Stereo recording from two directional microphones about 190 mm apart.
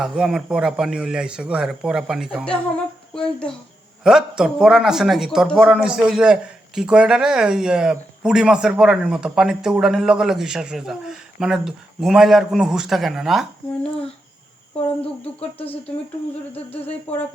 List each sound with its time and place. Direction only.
0.0 s a man's voice: centre (ahead or behind)
15.0 s speech: 5° left (ahead or behind)
15.5 s a sound: 30° left (ahead or behind)
16.8 s speech: 10° left (ahead or behind)